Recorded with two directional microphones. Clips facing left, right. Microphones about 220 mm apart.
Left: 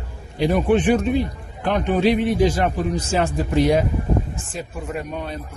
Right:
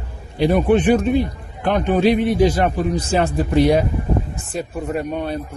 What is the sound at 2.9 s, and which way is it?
Speech, 35° right (ahead or behind).